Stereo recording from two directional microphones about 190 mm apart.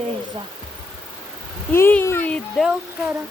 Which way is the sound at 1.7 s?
10° left (ahead or behind).